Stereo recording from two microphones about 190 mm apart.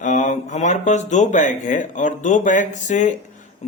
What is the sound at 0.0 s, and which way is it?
Speech, 40° left (ahead or behind).